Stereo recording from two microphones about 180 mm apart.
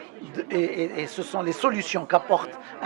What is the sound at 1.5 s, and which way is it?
Speech, 15° right (ahead or behind).